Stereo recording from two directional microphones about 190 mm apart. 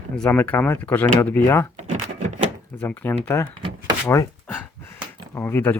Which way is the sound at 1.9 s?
40° right (ahead or behind).